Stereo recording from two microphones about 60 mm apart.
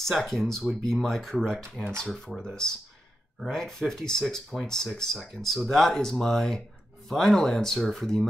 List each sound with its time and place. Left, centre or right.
0.2 s speech: centre
2.4 s speech: centre